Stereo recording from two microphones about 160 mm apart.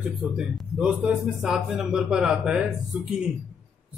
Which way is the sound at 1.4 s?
Centre (ahead or behind).